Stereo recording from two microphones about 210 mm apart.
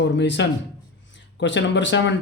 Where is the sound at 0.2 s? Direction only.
55° left (ahead or behind).